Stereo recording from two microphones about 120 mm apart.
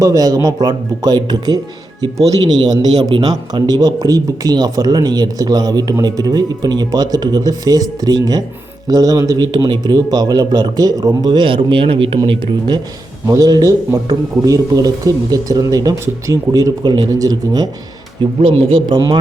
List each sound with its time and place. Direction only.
0.0 s a man's voice: 30° right (ahead or behind)
13.2 s a man's voice: 30° right (ahead or behind)
18.3 s speech: 50° right (ahead or behind)